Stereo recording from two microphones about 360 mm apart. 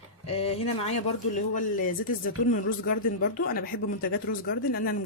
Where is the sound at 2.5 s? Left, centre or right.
Left.